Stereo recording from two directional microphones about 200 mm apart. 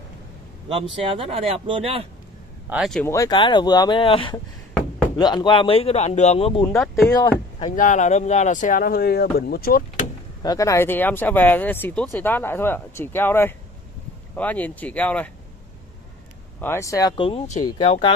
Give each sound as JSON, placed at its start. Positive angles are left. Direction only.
{"t": 0.7, "sound": "speech", "side_deg": -25}
{"t": 2.7, "sound": "speech", "side_deg": 0}
{"t": 3.1, "sound": "speech", "side_deg": 20}
{"t": 6.7, "sound": "speech", "side_deg": 0}
{"t": 7.6, "sound": "speech", "side_deg": 40}
{"t": 10.4, "sound": "speech", "side_deg": 15}
{"t": 16.6, "sound": "speech", "side_deg": 15}
{"t": 17.3, "sound": "speech", "side_deg": 35}